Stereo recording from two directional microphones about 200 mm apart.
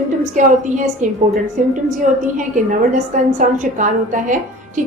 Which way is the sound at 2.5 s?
40° right (ahead or behind).